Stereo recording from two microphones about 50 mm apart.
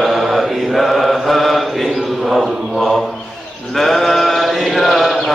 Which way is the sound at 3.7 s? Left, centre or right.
Centre.